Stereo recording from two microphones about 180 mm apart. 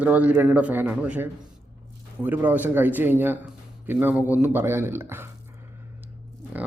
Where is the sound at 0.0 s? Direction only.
10° right (ahead or behind).